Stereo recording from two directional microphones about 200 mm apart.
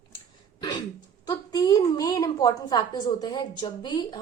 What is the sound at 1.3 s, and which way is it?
A woman's voice, 15° left (ahead or behind).